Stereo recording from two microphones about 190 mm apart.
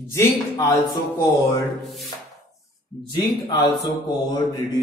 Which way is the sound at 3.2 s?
25° left (ahead or behind).